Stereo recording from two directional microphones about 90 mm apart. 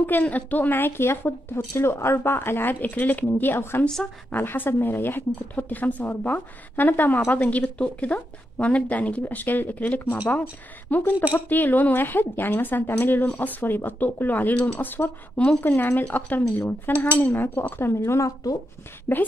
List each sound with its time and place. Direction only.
0.0 s a woman's voice: 20° left (ahead or behind)
3.8 s a woman's voice: 10° left (ahead or behind)
4.3 s a woman's voice: 20° left (ahead or behind); by 18.6 s 40° left (ahead or behind)
19.1 s a woman's voice: 25° left (ahead or behind)